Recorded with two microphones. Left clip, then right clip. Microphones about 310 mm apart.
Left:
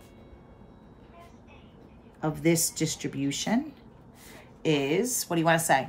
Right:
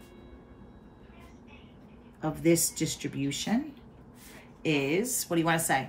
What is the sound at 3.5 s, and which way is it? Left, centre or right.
A woman's voice, centre.